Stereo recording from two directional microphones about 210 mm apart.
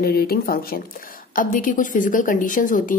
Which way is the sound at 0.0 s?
45° left (ahead or behind).